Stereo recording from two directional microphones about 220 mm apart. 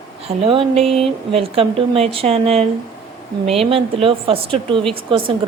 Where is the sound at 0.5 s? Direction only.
25° right (ahead or behind).